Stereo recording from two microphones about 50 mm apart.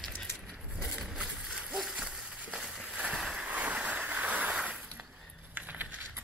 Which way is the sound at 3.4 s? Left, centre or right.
Right.